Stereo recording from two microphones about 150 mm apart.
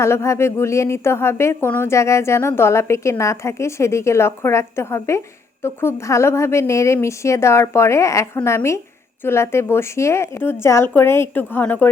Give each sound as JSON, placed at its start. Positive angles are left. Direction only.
{"t": 0.0, "sound": "a woman's voice", "side_deg": 20}